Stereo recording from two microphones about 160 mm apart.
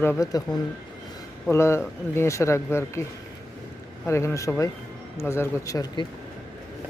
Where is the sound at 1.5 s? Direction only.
15° left (ahead or behind).